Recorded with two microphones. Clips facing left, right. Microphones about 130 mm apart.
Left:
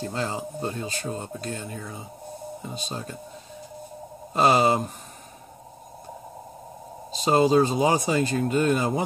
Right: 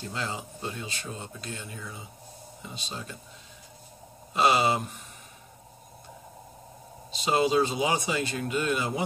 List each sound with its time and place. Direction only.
0.0 s speech: 40° left (ahead or behind)
4.3 s speech: 45° left (ahead or behind)
7.1 s speech: 40° left (ahead or behind)